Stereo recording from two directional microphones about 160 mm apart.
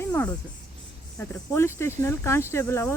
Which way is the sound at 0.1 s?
10° left (ahead or behind).